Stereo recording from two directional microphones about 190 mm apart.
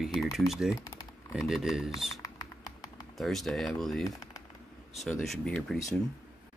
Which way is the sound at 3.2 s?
Centre (ahead or behind).